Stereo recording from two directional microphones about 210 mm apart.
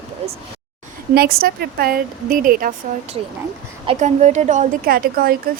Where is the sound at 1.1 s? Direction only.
50° right (ahead or behind).